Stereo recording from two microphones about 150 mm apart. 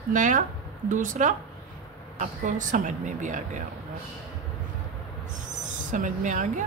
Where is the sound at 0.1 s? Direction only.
60° right (ahead or behind).